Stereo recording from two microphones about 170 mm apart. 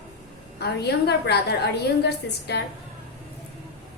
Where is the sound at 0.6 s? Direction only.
75° left (ahead or behind).